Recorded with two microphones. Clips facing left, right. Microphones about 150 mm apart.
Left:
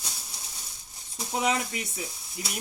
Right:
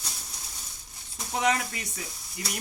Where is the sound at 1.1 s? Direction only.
5° left (ahead or behind).